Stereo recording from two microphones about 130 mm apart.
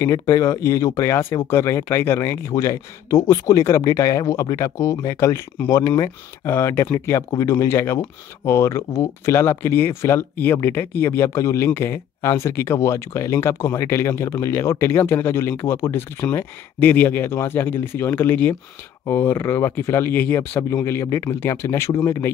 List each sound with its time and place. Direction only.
0.0 s speech: 20° left (ahead or behind)